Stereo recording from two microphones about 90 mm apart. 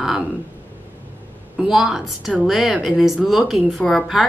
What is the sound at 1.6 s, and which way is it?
A woman's voice, 5° right (ahead or behind).